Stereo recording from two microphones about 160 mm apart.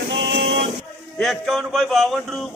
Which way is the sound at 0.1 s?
90° right.